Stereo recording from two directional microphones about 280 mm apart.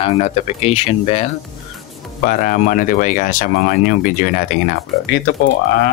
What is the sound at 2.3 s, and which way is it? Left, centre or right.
Speech, left.